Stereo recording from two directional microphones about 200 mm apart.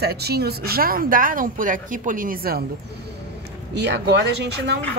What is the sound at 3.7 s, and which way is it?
Speech, 55° right (ahead or behind).